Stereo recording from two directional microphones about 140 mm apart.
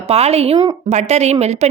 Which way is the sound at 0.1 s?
45° right (ahead or behind).